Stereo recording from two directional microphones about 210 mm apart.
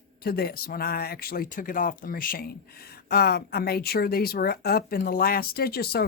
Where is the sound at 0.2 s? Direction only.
45° left (ahead or behind).